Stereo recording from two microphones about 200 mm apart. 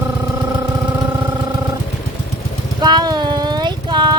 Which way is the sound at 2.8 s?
20° right (ahead or behind).